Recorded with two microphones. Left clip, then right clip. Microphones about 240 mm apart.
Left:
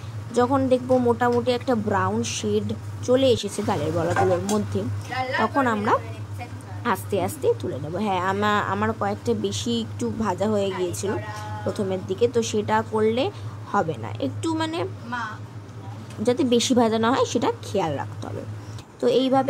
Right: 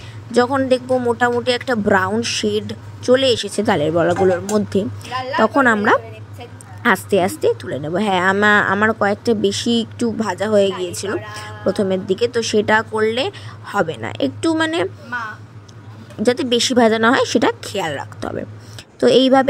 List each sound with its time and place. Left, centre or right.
0.3 s speech: right
15.1 s speech: centre
16.2 s speech: right